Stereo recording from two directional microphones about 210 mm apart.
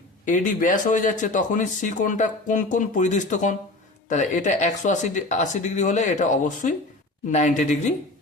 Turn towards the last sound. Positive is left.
turn(degrees=35)  # may be behind; listen again after turning